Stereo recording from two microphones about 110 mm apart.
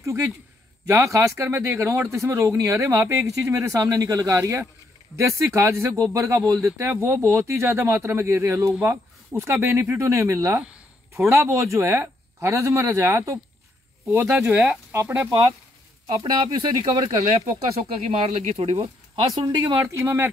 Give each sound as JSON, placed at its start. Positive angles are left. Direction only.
{"t": 0.0, "sound": "a man's voice", "side_deg": -25}
{"t": 16.1, "sound": "speech", "side_deg": -50}
{"t": 18.0, "sound": "speech", "side_deg": -75}
{"t": 19.3, "sound": "speech", "side_deg": -40}
{"t": 19.8, "sound": "speech", "side_deg": -20}